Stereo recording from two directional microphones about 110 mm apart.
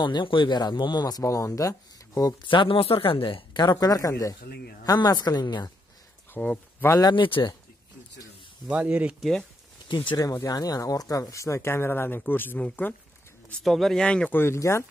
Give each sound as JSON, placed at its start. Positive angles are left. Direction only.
{"t": 0.0, "sound": "speech", "side_deg": 45}
{"t": 2.4, "sound": "speech", "side_deg": 50}
{"t": 6.3, "sound": "speech", "side_deg": 15}
{"t": 6.9, "sound": "speech", "side_deg": 40}
{"t": 8.6, "sound": "speech", "side_deg": -10}
{"t": 9.2, "sound": "speech", "side_deg": 5}
{"t": 9.8, "sound": "speech", "side_deg": 45}
{"t": 10.1, "sound": "speech", "side_deg": 30}
{"t": 13.5, "sound": "speech", "side_deg": 5}
{"t": 14.4, "sound": "speech", "side_deg": 25}